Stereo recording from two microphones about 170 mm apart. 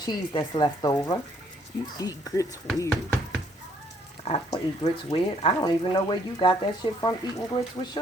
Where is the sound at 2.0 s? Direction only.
20° left (ahead or behind).